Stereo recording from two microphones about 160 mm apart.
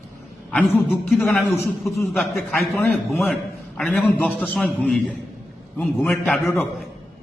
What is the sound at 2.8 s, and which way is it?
Speech, 15° left (ahead or behind).